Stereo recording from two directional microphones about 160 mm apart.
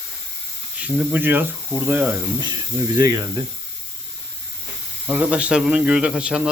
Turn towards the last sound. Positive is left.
turn(degrees=-5)  # may be behind; listen again after turning